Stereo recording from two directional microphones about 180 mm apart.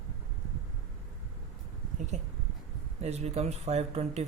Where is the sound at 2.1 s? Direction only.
40° right (ahead or behind).